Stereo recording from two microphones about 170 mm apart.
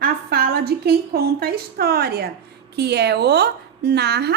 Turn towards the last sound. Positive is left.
turn(degrees=-75)  # may be behind; listen again after turning